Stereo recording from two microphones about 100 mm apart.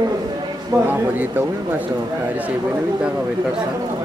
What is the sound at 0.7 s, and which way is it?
Speech, 20° right (ahead or behind).